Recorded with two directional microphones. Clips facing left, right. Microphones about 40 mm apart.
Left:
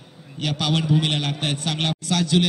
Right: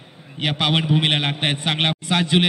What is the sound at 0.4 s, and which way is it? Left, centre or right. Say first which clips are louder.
A man's voice: right 3 dB; right.